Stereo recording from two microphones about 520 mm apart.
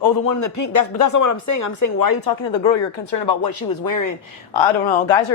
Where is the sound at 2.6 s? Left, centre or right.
Left.